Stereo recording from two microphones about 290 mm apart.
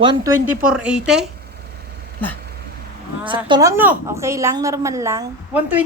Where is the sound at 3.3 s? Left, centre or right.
Centre.